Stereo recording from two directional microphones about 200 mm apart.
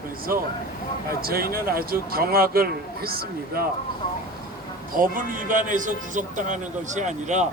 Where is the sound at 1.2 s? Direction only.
50° right (ahead or behind).